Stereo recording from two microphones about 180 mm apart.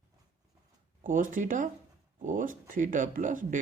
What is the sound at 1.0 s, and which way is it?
Speech, 45° right (ahead or behind).